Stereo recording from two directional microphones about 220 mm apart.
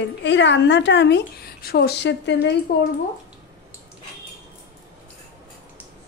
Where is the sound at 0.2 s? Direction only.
55° left (ahead or behind).